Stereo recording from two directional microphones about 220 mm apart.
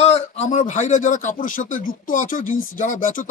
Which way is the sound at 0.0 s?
30° left (ahead or behind).